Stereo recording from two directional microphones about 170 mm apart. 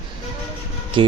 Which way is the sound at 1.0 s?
30° right (ahead or behind).